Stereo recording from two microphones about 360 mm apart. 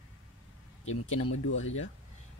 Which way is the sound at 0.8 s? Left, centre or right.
Left.